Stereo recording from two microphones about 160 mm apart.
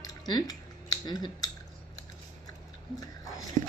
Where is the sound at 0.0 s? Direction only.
25° left (ahead or behind).